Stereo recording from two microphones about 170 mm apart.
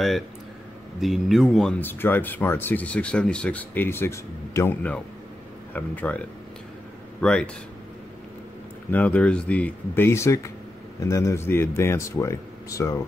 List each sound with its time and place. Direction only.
1.0 s speech: centre (ahead or behind)
8.9 s speech: 10° left (ahead or behind)